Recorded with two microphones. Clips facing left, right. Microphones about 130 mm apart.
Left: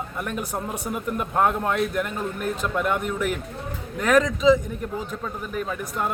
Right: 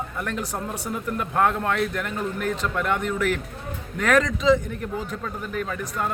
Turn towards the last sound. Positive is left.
turn(degrees=10)  # may be behind; listen again after turning